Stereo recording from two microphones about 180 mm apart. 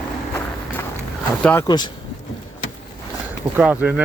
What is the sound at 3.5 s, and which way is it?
Speech, 10° right (ahead or behind).